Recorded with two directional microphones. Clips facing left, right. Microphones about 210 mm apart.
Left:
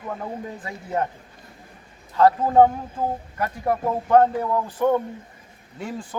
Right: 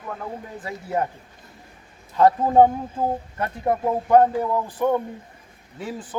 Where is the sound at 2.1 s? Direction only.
20° right (ahead or behind).